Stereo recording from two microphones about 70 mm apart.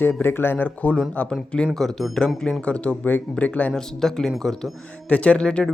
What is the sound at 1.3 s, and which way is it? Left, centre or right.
Speech, centre.